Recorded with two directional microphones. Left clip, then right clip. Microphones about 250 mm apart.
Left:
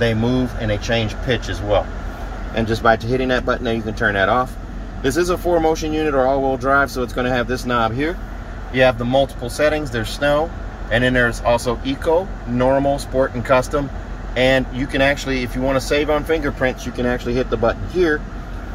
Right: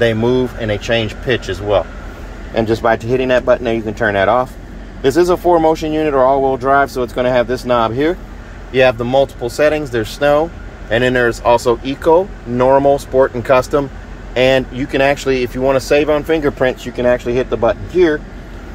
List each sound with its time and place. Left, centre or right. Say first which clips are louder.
0.0 s speech: right 6 dB; centre